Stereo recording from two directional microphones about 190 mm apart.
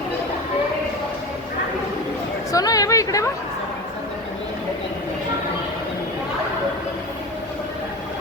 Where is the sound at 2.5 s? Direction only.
20° left (ahead or behind).